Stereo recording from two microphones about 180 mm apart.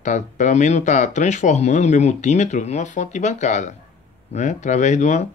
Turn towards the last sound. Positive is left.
turn(degrees=40)  # may be behind; listen again after turning